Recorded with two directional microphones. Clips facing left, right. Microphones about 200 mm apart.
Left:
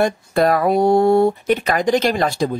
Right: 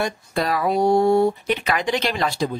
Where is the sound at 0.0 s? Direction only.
55° left (ahead or behind).